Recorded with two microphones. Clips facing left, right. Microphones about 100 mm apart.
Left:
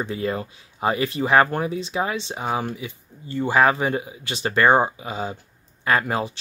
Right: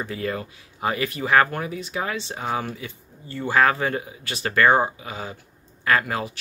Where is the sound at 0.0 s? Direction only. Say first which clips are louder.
Left 2 dB; 25° left (ahead or behind).